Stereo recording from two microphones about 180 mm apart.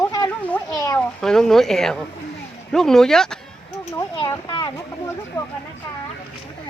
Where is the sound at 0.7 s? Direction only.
20° left (ahead or behind).